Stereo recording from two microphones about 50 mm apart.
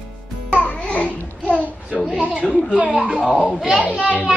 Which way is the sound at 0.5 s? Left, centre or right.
Left.